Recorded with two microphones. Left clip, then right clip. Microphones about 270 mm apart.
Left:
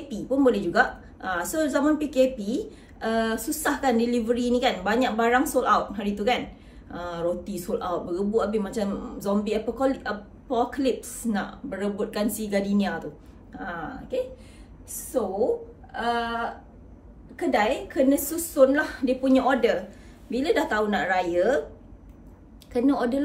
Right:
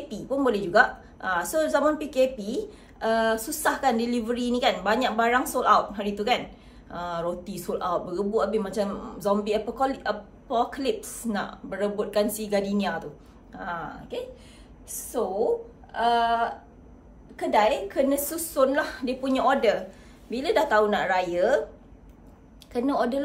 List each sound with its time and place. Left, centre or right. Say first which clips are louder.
0.1 s speech: left 3 dB; centre
14.9 s speech: left 1 dB; centre
17.5 s speech: right 2 dB; centre
22.7 s speech: left 1 dB; centre